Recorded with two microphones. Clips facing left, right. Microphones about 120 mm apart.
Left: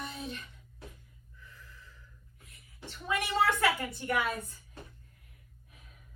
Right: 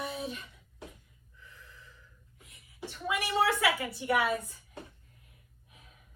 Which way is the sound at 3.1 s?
5° right (ahead or behind).